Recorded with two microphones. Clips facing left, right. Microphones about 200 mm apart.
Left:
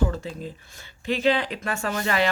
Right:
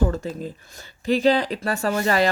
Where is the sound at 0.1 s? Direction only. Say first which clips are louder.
Right 4 dB; 45° right (ahead or behind).